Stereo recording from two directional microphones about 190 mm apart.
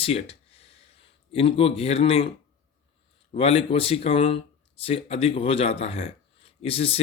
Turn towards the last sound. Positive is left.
turn(degrees=30)  # may be behind; listen again after turning